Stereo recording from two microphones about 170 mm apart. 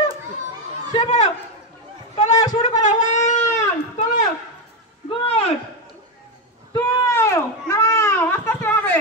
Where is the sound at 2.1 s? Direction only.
45° left (ahead or behind).